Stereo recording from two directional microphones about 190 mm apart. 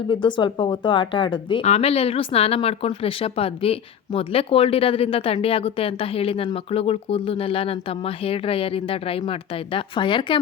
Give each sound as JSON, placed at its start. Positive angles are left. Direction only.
{"t": 0.1, "sound": "a woman's voice", "side_deg": 25}